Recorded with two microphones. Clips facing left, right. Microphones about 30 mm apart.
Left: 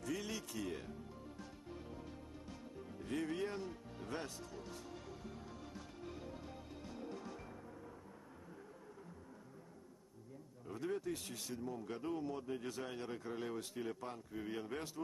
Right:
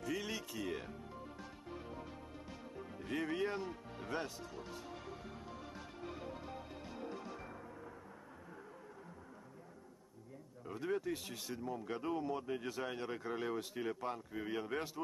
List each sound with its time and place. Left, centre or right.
0.0 s music: centre
0.7 s music: centre
3.1 s music: centre
10.7 s speech: centre